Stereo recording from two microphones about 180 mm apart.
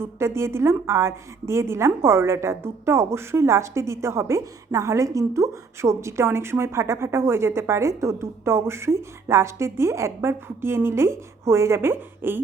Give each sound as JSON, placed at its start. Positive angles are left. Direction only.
{"t": 0.0, "sound": "a woman's voice", "side_deg": -15}